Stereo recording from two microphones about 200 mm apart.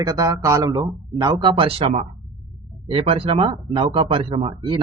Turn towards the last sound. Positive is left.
turn(degrees=-25)  # may be behind; listen again after turning